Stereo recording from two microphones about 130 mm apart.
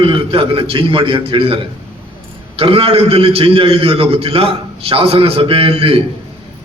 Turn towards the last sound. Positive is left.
turn(degrees=-45)  # may be behind; listen again after turning